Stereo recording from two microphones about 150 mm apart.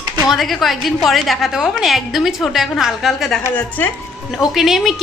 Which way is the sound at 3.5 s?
10° left (ahead or behind).